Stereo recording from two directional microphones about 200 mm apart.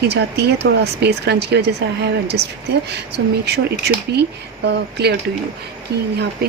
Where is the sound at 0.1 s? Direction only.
55° right (ahead or behind).